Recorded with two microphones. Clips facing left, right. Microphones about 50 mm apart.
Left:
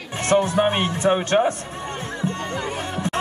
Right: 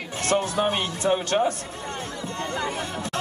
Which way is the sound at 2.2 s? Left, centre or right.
Left.